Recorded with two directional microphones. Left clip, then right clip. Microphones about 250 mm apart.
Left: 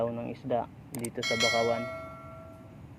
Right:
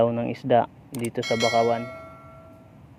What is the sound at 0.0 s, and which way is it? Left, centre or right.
Speech, right.